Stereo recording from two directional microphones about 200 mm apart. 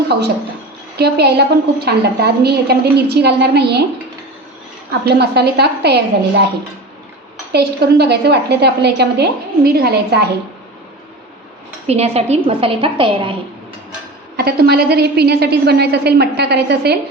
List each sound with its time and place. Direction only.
0.9 s a woman's voice: 55° right (ahead or behind)
5.0 s a woman's voice: 55° right (ahead or behind)
7.5 s a woman's voice: 55° right (ahead or behind)
11.9 s a woman's voice: 30° right (ahead or behind)
14.3 s a woman's voice: 50° right (ahead or behind)